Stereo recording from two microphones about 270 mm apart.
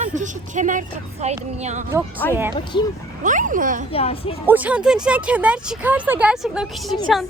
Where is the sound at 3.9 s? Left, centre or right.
Left.